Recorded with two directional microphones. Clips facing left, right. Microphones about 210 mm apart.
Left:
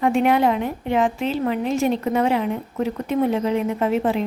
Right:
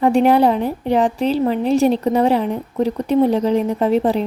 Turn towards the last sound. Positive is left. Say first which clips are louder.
# right 4 dB
turn(degrees=-35)  # may be behind; listen again after turning